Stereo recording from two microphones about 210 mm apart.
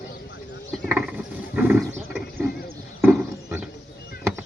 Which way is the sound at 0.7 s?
5° right (ahead or behind).